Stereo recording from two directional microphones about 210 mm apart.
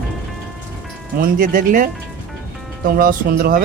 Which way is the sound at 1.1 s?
40° right (ahead or behind).